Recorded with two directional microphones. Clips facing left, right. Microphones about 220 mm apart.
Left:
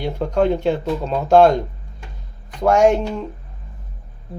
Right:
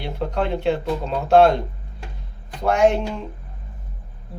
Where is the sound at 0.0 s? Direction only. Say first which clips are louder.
Left 6 dB; 40° left (ahead or behind).